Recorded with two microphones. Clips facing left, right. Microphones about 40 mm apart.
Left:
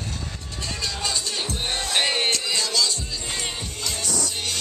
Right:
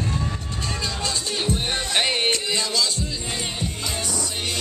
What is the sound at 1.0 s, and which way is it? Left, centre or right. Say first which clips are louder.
Music: right 2 dB; centre.